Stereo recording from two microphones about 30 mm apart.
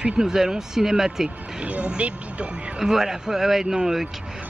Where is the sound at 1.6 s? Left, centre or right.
Right.